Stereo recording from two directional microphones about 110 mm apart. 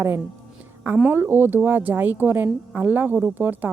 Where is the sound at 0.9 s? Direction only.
15° right (ahead or behind).